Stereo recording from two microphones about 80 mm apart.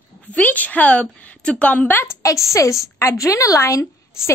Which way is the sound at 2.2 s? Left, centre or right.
Left.